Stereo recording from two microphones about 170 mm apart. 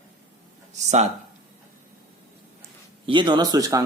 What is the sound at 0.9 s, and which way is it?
Speech, 40° right (ahead or behind).